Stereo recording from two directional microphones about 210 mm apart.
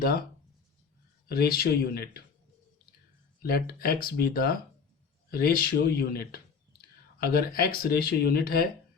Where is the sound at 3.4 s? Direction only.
45° left (ahead or behind).